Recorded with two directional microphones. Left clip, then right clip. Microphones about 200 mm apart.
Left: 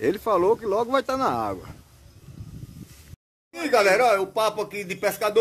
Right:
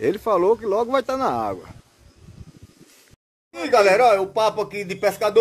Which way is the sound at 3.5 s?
15° right (ahead or behind).